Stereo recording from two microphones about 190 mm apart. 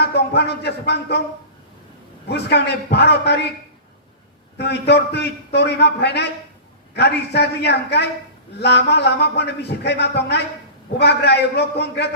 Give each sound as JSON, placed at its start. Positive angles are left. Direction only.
{"t": 0.0, "sound": "speech", "side_deg": 60}
{"t": 2.3, "sound": "a man's voice", "side_deg": 60}
{"t": 4.5, "sound": "a man's voice", "side_deg": 60}